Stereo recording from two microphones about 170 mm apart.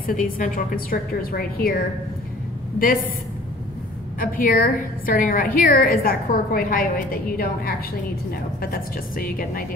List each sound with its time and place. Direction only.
0.0 s a woman's voice: 50° left (ahead or behind)
4.2 s a woman's voice: 55° left (ahead or behind)